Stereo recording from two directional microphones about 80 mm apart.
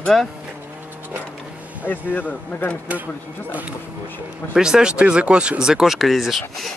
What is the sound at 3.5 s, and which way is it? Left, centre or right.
Speech, centre.